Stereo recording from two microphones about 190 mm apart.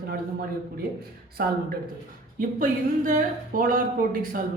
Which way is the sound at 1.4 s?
55° right (ahead or behind).